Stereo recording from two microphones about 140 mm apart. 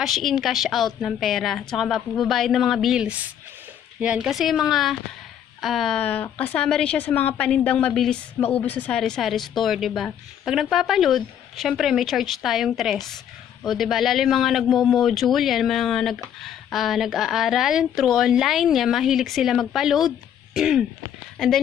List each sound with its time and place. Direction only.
0.0 s a woman's voice: centre (ahead or behind)
20.5 s throat clearing: 5° right (ahead or behind)